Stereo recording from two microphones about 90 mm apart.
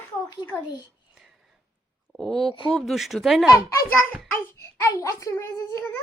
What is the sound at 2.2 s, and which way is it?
Speech, centre (ahead or behind).